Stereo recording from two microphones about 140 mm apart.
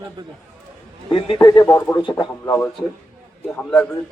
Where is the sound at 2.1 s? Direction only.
30° left (ahead or behind).